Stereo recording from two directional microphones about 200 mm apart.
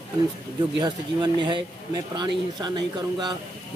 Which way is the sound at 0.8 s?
20° right (ahead or behind).